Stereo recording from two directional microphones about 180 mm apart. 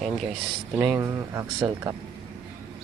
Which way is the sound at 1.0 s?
15° right (ahead or behind).